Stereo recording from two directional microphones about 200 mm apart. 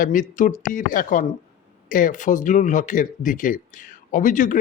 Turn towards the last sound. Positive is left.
turn(degrees=40)  # may be behind; listen again after turning